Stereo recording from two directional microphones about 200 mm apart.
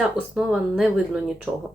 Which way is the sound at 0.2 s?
20° left (ahead or behind).